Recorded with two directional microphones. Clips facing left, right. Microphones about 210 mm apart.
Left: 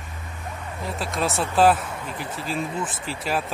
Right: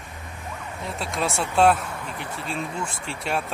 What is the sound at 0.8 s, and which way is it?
Speech, centre (ahead or behind).